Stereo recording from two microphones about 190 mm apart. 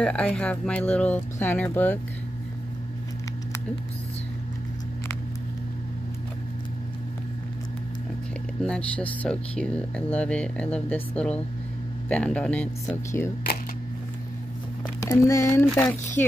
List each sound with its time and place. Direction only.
0.0 s speech: 5° left (ahead or behind)
8.6 s speech: 5° left (ahead or behind)
15.0 s speech: 15° left (ahead or behind)
15.7 s speech: centre (ahead or behind)